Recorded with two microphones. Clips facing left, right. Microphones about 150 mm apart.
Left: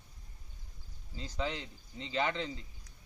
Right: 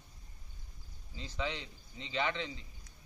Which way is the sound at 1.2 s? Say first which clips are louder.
Left 2 dB; 40° left (ahead or behind).